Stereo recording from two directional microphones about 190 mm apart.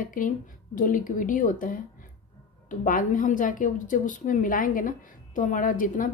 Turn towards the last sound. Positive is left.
turn(degrees=45)  # may be behind; listen again after turning